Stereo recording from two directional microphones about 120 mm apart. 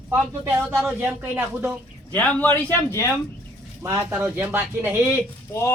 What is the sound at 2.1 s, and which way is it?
Speech, 10° left (ahead or behind).